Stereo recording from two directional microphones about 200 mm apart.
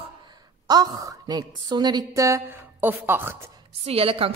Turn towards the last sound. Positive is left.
turn(degrees=-30)  # may be behind; listen again after turning